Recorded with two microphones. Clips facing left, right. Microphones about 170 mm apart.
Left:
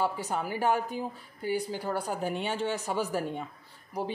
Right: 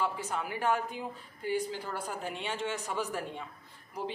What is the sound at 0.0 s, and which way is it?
A woman's voice, 35° left (ahead or behind).